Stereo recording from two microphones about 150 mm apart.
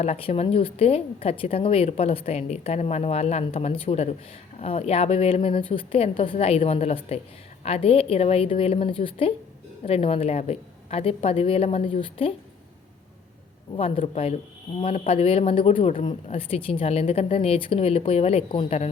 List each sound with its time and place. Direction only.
0.0 s a woman's voice: 40° left (ahead or behind)
13.7 s a woman's voice: 40° left (ahead or behind)